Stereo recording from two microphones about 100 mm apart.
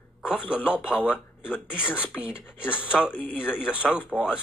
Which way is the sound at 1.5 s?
20° left (ahead or behind).